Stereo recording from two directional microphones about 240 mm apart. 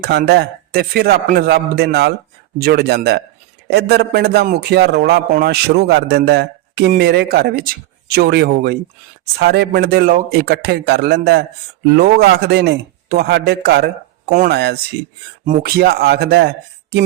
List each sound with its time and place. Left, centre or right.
0.0 s a man's voice: right